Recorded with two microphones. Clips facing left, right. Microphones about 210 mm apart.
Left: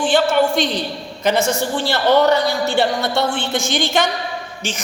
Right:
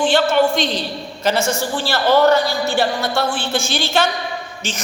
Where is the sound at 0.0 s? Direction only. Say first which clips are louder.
Even; 15° left (ahead or behind).